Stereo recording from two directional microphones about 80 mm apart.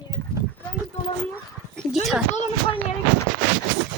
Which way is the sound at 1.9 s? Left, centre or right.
Centre.